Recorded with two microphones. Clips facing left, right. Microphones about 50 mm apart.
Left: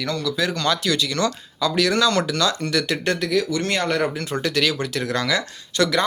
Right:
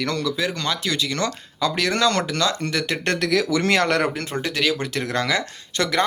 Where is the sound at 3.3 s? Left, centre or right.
Right.